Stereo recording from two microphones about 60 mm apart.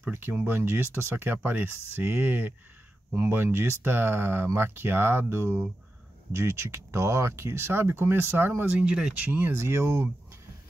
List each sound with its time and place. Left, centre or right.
0.1 s speech: right
3.4 s speech: right; by 9.2 s centre
9.2 s speech: right
9.6 s speech: right